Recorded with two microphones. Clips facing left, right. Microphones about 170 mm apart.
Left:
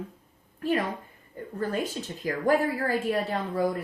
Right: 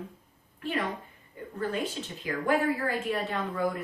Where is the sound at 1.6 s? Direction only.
40° left (ahead or behind).